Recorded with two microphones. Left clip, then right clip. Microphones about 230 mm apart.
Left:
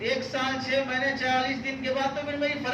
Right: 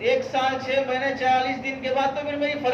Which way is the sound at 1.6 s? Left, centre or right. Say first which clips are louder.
Right 4 dB; centre.